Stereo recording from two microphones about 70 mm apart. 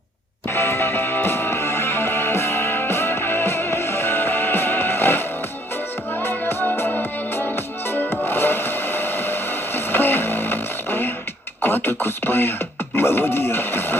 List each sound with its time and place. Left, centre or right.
0.4 s music: left
11.6 s beatboxing: left